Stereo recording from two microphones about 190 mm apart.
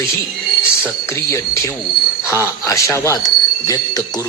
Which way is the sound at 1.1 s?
15° left (ahead or behind).